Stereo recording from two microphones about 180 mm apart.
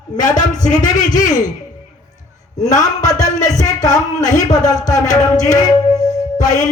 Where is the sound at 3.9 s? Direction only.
45° left (ahead or behind).